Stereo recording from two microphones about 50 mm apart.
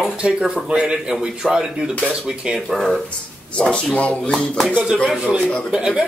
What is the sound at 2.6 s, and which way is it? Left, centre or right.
Speech, centre.